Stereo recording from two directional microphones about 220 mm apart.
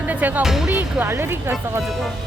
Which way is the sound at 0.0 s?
5° right (ahead or behind).